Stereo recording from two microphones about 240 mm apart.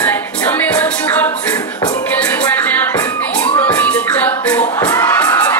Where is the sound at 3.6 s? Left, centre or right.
Centre.